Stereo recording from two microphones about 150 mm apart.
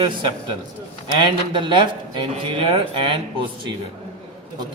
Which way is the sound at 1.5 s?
35° right (ahead or behind).